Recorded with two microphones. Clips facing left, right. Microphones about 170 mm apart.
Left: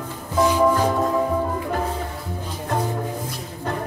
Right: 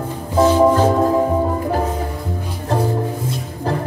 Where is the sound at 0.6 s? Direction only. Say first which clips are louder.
Right 5 dB; 30° right (ahead or behind).